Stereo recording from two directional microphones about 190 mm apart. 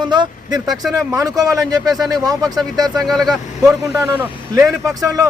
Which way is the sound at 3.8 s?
15° right (ahead or behind).